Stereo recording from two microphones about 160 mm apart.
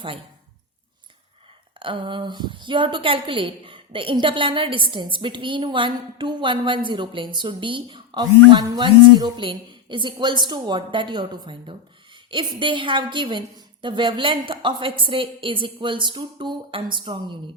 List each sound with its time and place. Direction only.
1.8 s a woman's voice: 30° right (ahead or behind)